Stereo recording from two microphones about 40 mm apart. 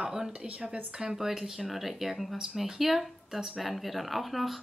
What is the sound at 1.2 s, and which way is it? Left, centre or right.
A woman's voice, centre.